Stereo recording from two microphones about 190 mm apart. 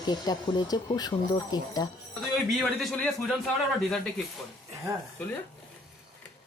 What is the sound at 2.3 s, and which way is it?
A man's voice, centre (ahead or behind).